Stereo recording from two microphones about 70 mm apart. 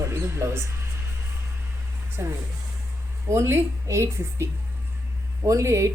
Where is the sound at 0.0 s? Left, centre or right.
Right.